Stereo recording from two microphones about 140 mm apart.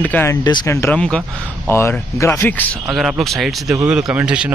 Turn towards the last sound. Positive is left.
turn(degrees=-10)  # may be behind; listen again after turning